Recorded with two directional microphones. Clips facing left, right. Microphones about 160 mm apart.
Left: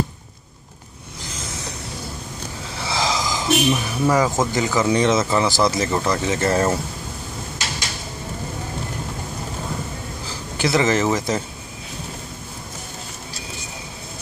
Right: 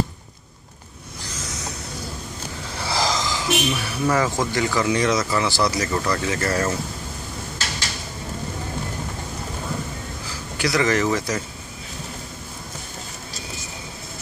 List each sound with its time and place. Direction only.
2.8 s a sound: centre (ahead or behind)
3.3 s speech: 15° left (ahead or behind)
10.6 s speech: 25° left (ahead or behind)